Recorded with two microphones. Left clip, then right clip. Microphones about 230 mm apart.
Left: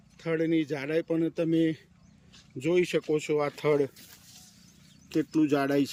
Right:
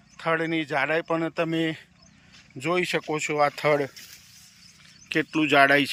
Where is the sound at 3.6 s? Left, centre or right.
Right.